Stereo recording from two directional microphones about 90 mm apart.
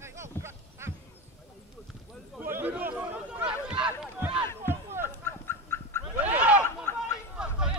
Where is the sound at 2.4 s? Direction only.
20° right (ahead or behind).